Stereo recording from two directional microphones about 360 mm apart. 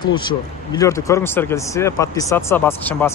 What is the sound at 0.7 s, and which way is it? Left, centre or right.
Speech, centre.